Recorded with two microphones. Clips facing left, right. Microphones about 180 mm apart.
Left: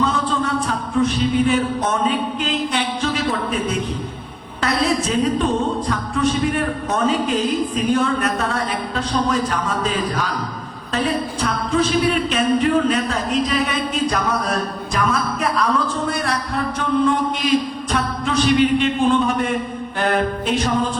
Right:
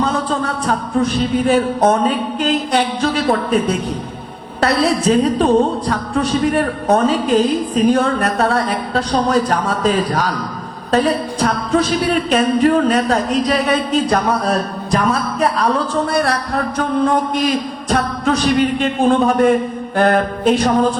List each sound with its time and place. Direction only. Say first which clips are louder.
0.0 s music: right 2 dB; 40° right (ahead or behind)
4.6 s music: right 5 dB; 35° right (ahead or behind)
17.3 s music: right 1 dB; 40° right (ahead or behind)
20.0 s a sound: right 5 dB; 40° right (ahead or behind)